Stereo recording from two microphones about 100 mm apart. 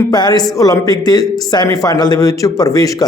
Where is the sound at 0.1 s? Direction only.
45° left (ahead or behind).